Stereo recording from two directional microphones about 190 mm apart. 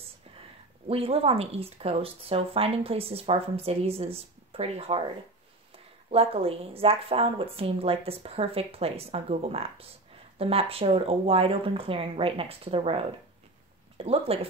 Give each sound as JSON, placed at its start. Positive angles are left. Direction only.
{"t": 0.8, "sound": "speech", "side_deg": -30}
{"t": 6.0, "sound": "speech", "side_deg": -30}